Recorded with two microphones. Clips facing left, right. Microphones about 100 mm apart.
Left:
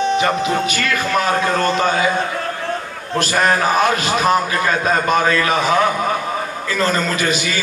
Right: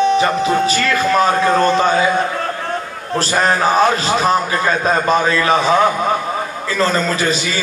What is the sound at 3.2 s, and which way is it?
A man's voice, 30° right (ahead or behind).